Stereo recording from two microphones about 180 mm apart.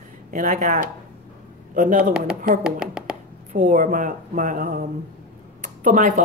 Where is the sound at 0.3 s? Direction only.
50° right (ahead or behind).